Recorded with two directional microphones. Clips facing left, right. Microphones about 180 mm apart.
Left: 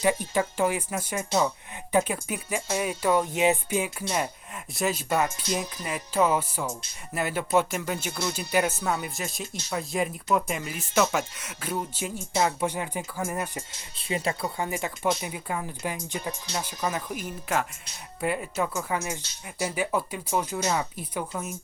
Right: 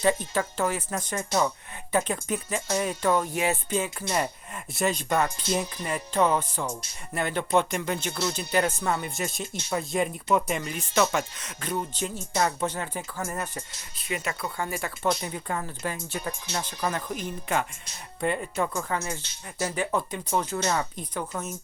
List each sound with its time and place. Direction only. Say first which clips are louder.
0.0 s speech: even; 10° left (ahead or behind)
5.5 s music: right 2 dB; centre (ahead or behind)
7.1 s speech: even; 5° left (ahead or behind)
13.9 s speech: left 3 dB; 30° left (ahead or behind)
14.6 s speech: right 1 dB; 15° left (ahead or behind)
15.1 s speech: even; 5° left (ahead or behind)